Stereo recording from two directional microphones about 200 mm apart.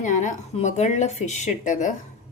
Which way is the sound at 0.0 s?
40° left (ahead or behind).